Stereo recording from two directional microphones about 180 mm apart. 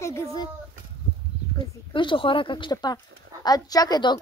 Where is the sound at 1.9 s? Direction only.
25° left (ahead or behind).